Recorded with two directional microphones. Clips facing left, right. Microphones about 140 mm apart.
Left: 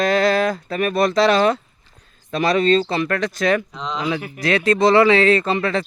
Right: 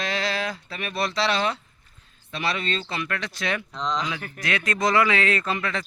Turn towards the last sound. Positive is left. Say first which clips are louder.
# left 8 dB
turn(degrees=35)  # may be behind; listen again after turning